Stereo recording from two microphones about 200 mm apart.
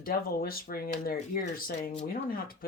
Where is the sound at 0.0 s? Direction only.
45° left (ahead or behind).